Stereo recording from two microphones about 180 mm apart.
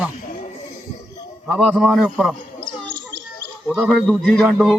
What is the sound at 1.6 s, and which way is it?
Speech, 5° right (ahead or behind).